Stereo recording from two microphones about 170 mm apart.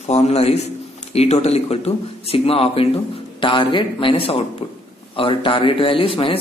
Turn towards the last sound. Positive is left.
turn(degrees=30)  # may be behind; listen again after turning